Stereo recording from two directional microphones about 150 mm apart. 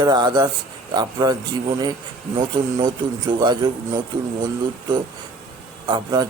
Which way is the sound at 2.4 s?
30° right (ahead or behind).